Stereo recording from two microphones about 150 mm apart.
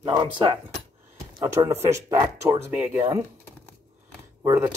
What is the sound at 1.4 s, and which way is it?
Speech, 25° right (ahead or behind).